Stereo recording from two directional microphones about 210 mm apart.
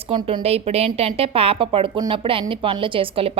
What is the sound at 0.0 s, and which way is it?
A woman's voice, 25° right (ahead or behind).